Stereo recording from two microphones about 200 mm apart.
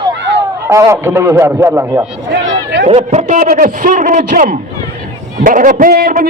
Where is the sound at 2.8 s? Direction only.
30° right (ahead or behind).